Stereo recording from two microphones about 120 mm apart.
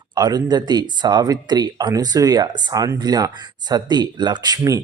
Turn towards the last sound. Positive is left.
turn(degrees=-30)  # may be behind; listen again after turning